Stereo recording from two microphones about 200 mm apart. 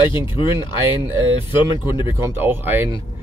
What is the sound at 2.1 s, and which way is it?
Speech, 10° right (ahead or behind).